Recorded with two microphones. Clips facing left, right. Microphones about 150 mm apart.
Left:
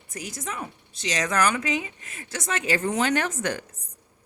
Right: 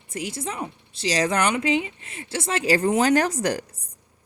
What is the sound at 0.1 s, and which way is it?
Speech, 25° right (ahead or behind).